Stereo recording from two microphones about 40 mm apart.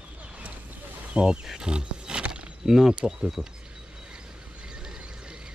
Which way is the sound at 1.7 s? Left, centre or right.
Right.